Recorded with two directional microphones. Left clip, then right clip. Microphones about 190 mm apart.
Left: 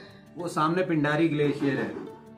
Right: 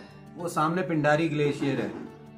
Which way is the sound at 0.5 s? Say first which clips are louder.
Left 1 dB; 55° right (ahead or behind).